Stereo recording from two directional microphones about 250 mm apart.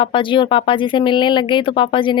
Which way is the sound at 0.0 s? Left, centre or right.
Centre.